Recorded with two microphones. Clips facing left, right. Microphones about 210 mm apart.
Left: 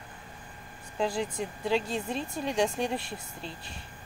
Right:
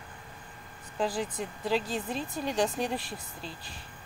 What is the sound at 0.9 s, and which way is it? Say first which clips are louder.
Speech: left 1 dB; 5° right (ahead or behind).